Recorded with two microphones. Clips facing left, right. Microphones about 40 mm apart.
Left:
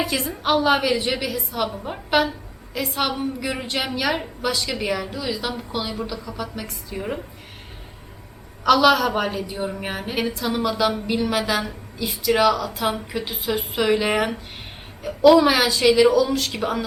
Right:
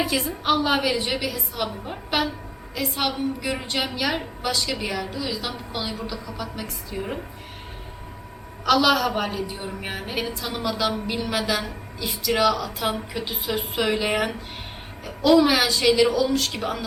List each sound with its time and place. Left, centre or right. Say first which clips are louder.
0.0 s a woman's voice: even; centre
8.6 s a woman's voice: left 3 dB; centre